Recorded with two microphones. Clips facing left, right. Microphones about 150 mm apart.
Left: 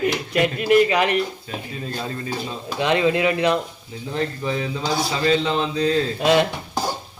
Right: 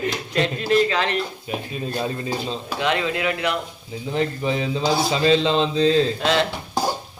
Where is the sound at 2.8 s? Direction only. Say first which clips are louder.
Left 4 dB; 20° left (ahead or behind).